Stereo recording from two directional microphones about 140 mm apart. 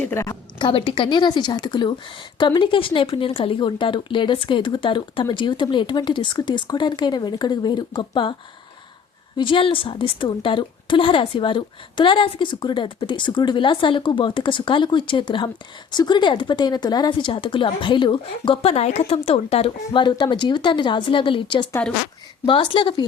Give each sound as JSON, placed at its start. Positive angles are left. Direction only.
{"t": 0.0, "sound": "a woman's voice", "side_deg": 20}
{"t": 0.6, "sound": "a woman's voice", "side_deg": 35}
{"t": 9.4, "sound": "a woman's voice", "side_deg": 40}